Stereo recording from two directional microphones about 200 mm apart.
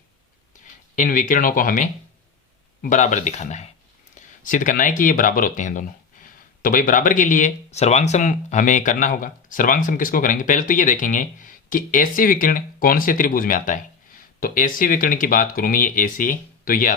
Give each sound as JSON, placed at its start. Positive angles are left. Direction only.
{"t": 0.9, "sound": "speech", "side_deg": 40}